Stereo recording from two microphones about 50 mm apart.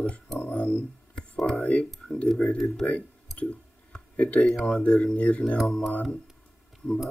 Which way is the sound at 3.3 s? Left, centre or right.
Centre.